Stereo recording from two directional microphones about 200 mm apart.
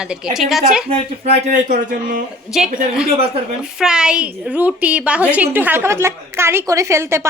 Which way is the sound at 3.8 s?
5° right (ahead or behind).